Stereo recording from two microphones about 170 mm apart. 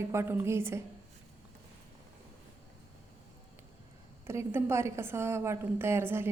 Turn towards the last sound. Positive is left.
turn(degrees=-15)  # may be behind; listen again after turning